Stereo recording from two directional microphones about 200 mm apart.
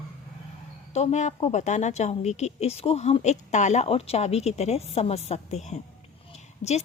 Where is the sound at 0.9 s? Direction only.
35° left (ahead or behind).